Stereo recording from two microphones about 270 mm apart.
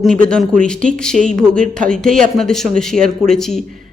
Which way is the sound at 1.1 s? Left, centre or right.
Right.